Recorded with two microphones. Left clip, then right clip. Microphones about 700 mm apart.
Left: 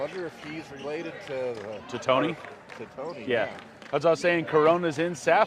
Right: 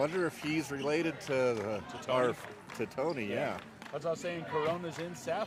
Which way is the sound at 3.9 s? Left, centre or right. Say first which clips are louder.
Left 13 dB; left.